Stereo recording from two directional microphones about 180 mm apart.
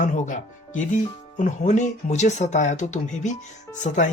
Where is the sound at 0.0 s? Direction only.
45° left (ahead or behind).